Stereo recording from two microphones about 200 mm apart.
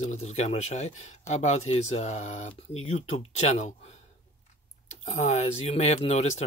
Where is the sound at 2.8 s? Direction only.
85° left.